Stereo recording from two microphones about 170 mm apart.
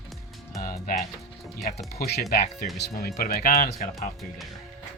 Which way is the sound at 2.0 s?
60° left (ahead or behind).